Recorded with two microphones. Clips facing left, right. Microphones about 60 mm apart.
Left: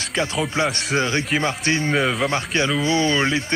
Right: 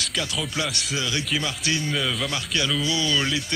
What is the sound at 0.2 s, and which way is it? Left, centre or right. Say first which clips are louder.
Speech: left 8 dB; left.